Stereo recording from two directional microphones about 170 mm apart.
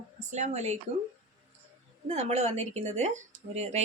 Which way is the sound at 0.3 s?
45° right (ahead or behind).